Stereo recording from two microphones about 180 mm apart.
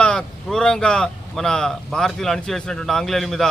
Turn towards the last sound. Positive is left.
turn(degrees=0)  # may be behind; listen again after turning